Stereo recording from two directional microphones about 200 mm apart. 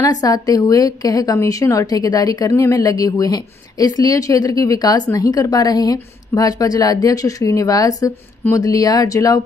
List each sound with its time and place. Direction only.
0.0 s a woman's voice: 20° left (ahead or behind)